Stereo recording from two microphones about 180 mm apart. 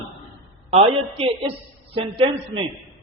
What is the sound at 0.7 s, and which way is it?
A woman's voice, 35° right (ahead or behind).